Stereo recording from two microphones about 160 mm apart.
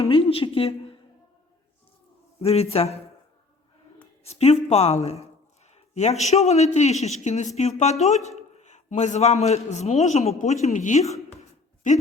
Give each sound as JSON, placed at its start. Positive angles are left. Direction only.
{"t": 0.0, "sound": "a woman's voice", "side_deg": 35}
{"t": 2.4, "sound": "speech", "side_deg": 40}
{"t": 4.2, "sound": "a man's voice", "side_deg": 40}
{"t": 11.1, "sound": "a sound", "side_deg": 45}